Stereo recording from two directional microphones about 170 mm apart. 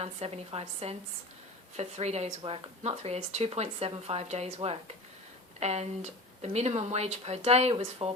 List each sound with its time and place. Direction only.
0.0 s speech: 35° right (ahead or behind)